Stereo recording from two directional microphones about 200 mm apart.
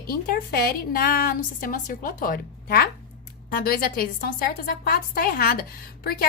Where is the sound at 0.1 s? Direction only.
45° left (ahead or behind).